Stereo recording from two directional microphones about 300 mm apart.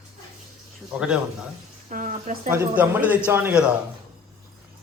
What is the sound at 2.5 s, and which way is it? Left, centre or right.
A man's voice, centre.